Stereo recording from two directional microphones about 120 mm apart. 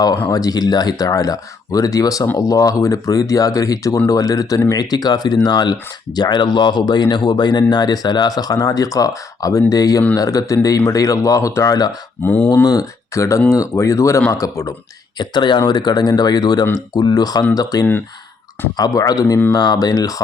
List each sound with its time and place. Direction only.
0.3 s speech: 30° left (ahead or behind)
12.2 s speech: 15° left (ahead or behind)
12.6 s speech: 30° left (ahead or behind)
15.2 s speech: 40° left (ahead or behind)